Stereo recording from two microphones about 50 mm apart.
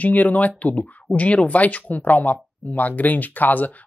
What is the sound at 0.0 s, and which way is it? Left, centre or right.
Speech, left.